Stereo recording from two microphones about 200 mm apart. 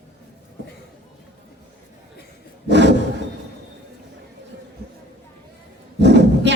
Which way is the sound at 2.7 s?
60° right (ahead or behind).